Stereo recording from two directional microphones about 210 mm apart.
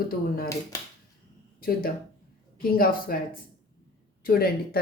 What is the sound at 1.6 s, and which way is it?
Speech, 45° left (ahead or behind).